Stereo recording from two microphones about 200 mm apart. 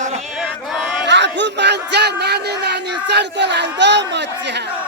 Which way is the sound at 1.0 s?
60° right (ahead or behind).